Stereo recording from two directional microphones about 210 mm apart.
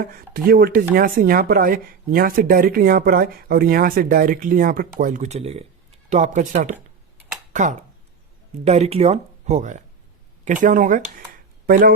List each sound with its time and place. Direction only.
0.0 s speech: 45° right (ahead or behind)